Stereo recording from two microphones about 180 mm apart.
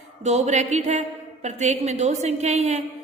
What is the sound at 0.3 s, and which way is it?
A woman's voice, 40° right (ahead or behind).